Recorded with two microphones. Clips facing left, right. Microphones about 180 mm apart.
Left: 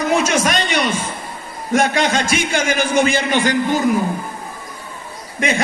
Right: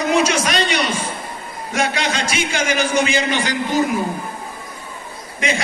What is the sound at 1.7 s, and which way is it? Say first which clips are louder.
A man's voice: left 5 dB; 50° left (ahead or behind).